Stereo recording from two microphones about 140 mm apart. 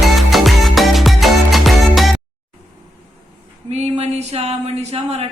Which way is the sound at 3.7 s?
50° right (ahead or behind).